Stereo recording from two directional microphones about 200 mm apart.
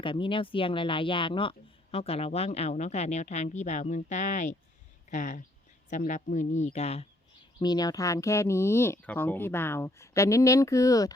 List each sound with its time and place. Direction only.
0.0 s speech: 25° left (ahead or behind)
7.6 s speech: 20° left (ahead or behind)